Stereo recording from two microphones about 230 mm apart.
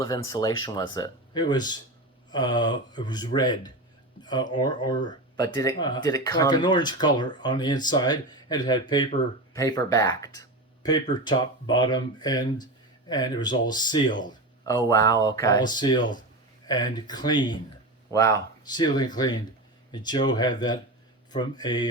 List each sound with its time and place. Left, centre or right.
0.0 s speech: centre
4.2 s a sound: centre
4.5 s speech: centre